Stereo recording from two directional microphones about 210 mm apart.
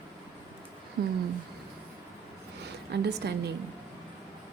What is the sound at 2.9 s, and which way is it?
Speech, 50° right (ahead or behind).